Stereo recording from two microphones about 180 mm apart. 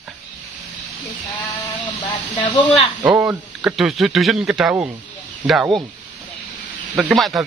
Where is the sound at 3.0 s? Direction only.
10° right (ahead or behind).